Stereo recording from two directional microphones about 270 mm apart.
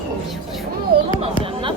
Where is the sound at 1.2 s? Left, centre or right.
Centre.